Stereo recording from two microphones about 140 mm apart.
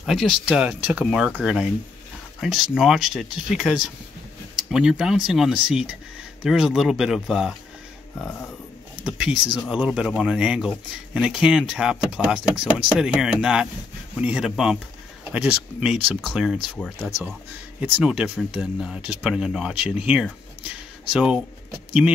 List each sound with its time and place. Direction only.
0.0 s speech: centre (ahead or behind)
8.9 s speech: 5° right (ahead or behind)
17.7 s speech: 10° right (ahead or behind)